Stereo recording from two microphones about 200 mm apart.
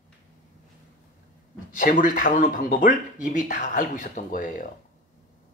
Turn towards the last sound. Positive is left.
turn(degrees=40)  # may be behind; listen again after turning